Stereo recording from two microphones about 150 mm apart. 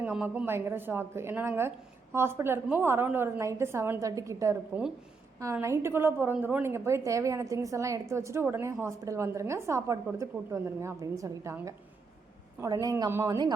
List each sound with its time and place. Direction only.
0.0 s a woman's voice: 10° right (ahead or behind); by 13.5 s 25° right (ahead or behind)